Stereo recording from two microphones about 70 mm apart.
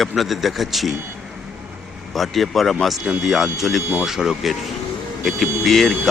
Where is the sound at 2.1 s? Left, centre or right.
Centre.